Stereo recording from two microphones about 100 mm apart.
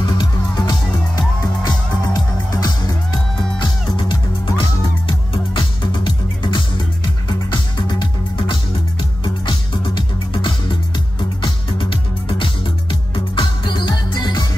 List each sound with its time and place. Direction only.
0.0 s music: 45° left (ahead or behind)
3.9 s music: 55° left (ahead or behind)